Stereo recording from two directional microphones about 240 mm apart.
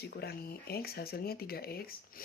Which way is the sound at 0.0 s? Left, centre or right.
Left.